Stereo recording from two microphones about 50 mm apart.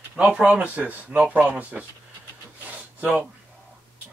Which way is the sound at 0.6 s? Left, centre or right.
Right.